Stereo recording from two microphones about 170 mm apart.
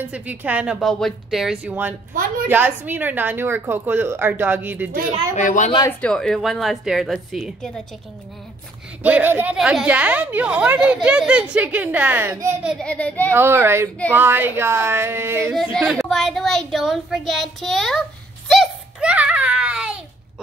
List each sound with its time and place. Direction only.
0.1 s speech: 10° right (ahead or behind)
5.3 s a woman's voice: 45° left (ahead or behind)
5.9 s speech: 5° left (ahead or behind)
9.0 s speech: 10° right (ahead or behind)
12.7 s a child's voice: 5° left (ahead or behind)
13.3 s speech: 15° right (ahead or behind)
15.5 s a child's voice: centre (ahead or behind)